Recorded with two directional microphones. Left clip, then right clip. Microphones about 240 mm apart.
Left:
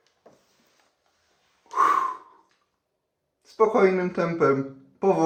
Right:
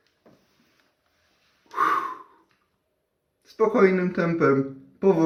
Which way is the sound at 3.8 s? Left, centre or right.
Left.